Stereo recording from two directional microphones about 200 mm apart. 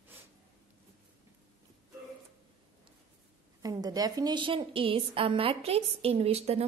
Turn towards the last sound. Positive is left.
turn(degrees=-30)  # may be behind; listen again after turning